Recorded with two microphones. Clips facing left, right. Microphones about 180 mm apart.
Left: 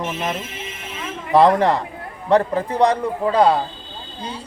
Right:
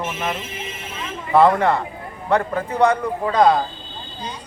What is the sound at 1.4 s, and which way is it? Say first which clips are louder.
A man's voice: left 1 dB; 35° left (ahead or behind).